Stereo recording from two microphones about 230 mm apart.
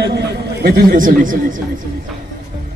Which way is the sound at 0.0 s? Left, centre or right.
Right.